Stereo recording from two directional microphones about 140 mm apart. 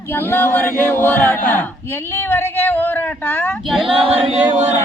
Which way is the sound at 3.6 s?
Centre (ahead or behind).